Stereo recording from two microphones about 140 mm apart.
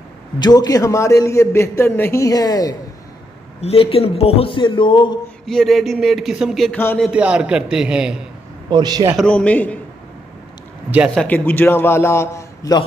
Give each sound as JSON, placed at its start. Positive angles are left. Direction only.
{"t": 0.4, "sound": "a man's voice", "side_deg": 30}
{"t": 3.6, "sound": "speech", "side_deg": 45}
{"t": 5.5, "sound": "a man's voice", "side_deg": 5}
{"t": 8.6, "sound": "a man's voice", "side_deg": -30}
{"t": 9.1, "sound": "a man's voice", "side_deg": 5}
{"t": 11.1, "sound": "a man's voice", "side_deg": 10}